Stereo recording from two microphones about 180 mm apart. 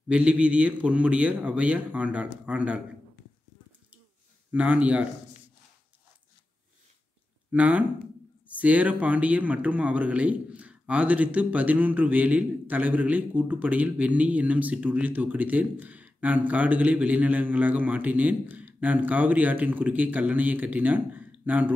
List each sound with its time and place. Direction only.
0.1 s speech: 5° right (ahead or behind)
4.5 s speech: 10° right (ahead or behind)
7.5 s speech: 5° right (ahead or behind)